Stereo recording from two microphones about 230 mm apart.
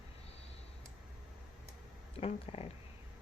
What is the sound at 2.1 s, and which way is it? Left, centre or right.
Speech, left.